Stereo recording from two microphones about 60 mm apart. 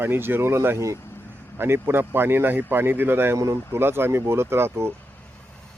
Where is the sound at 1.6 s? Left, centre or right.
Right.